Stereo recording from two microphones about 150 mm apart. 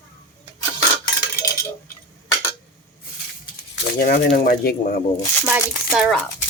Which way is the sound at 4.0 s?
80° left.